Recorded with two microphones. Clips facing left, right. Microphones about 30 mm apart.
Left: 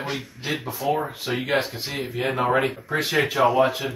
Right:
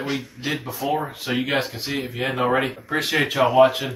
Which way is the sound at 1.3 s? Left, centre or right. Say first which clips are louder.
Right 4 dB; right.